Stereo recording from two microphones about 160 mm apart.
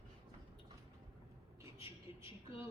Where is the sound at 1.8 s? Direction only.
35° left (ahead or behind).